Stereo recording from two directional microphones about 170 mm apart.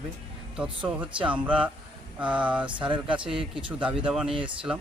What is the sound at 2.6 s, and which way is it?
Speech, 30° right (ahead or behind).